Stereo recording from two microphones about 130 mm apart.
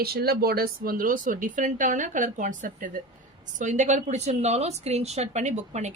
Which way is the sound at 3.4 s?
70° right (ahead or behind).